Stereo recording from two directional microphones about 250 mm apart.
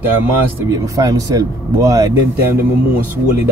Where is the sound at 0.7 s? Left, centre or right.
Centre.